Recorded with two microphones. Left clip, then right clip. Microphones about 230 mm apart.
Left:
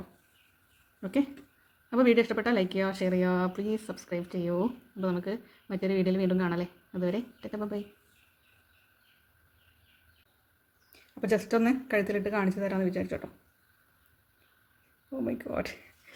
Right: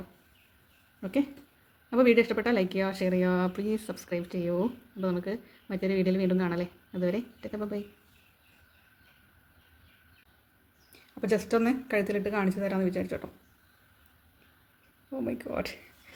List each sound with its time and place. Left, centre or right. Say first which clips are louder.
1.0 s speech: even; centre
11.1 s speech: even; centre
15.1 s speech: even; centre